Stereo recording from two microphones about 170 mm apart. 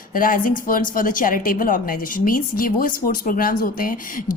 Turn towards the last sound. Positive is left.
turn(degrees=55)  # may be behind; listen again after turning